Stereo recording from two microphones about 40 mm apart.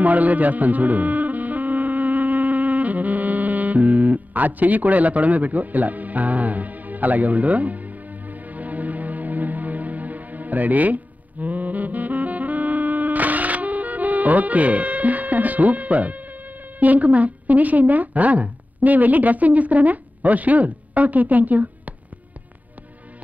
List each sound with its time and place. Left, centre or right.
0.0 s music: right
16.8 s a woman's voice: right